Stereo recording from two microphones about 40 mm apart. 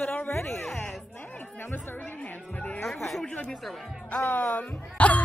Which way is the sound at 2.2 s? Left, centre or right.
Left.